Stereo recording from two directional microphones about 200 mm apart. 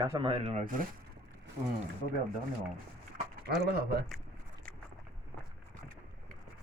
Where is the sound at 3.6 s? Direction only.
50° right (ahead or behind).